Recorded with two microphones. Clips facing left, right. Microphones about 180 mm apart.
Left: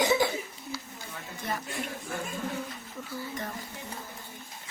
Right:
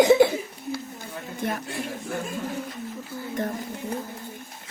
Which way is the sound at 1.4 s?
60° right (ahead or behind).